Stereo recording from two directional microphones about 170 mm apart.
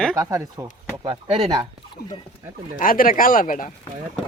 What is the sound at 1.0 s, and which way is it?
Speech, 30° right (ahead or behind).